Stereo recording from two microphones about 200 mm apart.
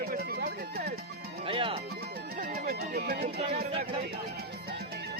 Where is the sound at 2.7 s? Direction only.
50° right (ahead or behind).